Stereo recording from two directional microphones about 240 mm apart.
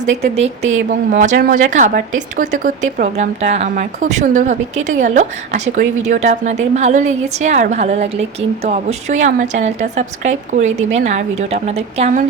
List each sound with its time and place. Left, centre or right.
0.0 s speech: right